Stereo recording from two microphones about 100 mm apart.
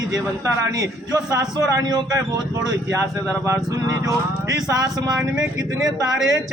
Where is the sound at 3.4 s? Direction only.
30° right (ahead or behind).